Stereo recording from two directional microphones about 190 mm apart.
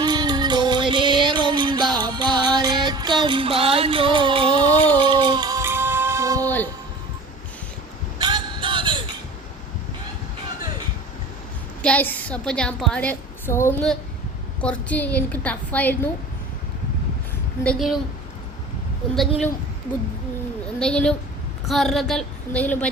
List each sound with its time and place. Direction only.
0.0 s music: 20° right (ahead or behind)
8.2 s a sound: 25° right (ahead or behind)
11.8 s a woman's voice: 5° left (ahead or behind)
17.6 s speech: centre (ahead or behind)
20.7 s speech: 5° left (ahead or behind)